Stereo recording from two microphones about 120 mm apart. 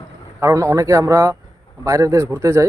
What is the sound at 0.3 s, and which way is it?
Speech, 25° right (ahead or behind).